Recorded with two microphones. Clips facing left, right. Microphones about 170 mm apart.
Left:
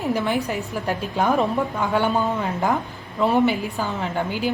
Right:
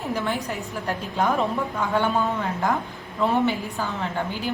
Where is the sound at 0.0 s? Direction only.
20° left (ahead or behind).